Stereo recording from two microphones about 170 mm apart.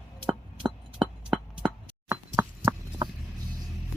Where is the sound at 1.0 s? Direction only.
5° right (ahead or behind).